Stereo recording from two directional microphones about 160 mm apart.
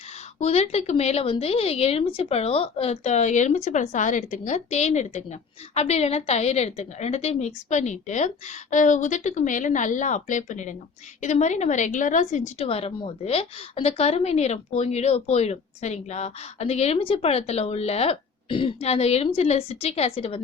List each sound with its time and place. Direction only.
0.3 s a woman's voice: 45° left (ahead or behind)